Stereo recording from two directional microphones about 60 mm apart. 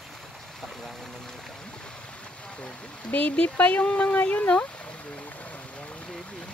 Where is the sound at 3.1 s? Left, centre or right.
Left.